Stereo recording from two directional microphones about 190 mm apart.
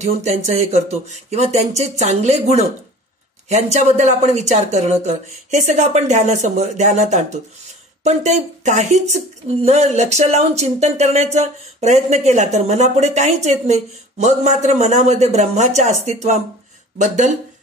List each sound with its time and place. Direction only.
0.0 s speech: 35° right (ahead or behind)